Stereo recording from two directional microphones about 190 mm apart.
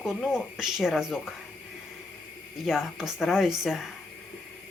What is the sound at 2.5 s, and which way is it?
Speech, centre (ahead or behind).